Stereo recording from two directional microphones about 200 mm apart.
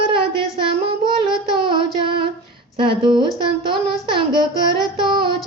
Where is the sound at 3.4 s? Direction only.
25° right (ahead or behind).